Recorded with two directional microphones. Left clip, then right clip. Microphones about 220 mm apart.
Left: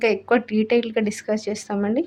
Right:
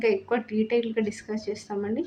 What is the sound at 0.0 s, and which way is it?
Speech, 45° left (ahead or behind).